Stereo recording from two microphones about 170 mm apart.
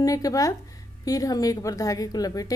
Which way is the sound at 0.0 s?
20° left (ahead or behind).